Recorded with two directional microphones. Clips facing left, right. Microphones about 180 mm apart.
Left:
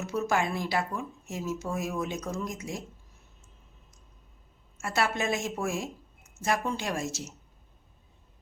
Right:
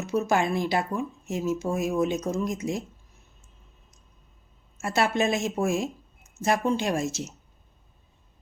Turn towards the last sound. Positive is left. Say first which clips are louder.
# right 6 dB
turn(degrees=-20)  # may be behind; listen again after turning